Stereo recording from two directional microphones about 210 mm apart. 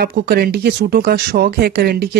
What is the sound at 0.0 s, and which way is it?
Speech, 45° right (ahead or behind).